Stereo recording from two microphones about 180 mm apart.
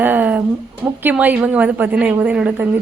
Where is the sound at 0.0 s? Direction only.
10° right (ahead or behind).